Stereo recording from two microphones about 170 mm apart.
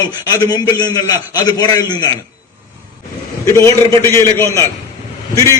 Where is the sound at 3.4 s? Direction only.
15° left (ahead or behind).